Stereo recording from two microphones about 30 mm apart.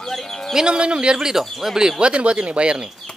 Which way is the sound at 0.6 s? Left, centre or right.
Right.